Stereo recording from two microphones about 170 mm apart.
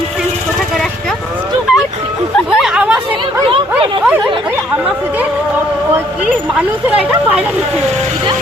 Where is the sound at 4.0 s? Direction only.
5° right (ahead or behind).